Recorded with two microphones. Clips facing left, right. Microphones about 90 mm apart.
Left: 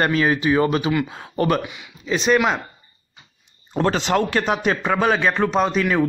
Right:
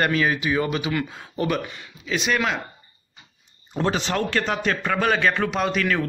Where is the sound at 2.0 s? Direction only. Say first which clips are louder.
Left 5 dB; 35° left (ahead or behind).